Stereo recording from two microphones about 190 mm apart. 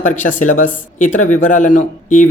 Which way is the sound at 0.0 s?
40° left (ahead or behind).